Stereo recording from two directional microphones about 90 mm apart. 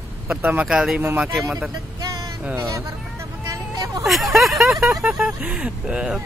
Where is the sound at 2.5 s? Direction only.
35° right (ahead or behind).